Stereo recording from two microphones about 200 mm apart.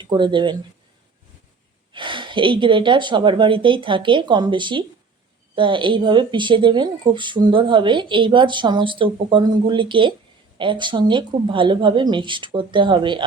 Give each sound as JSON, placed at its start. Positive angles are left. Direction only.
{"t": 0.0, "sound": "speech", "side_deg": -25}
{"t": 1.9, "sound": "speech", "side_deg": -25}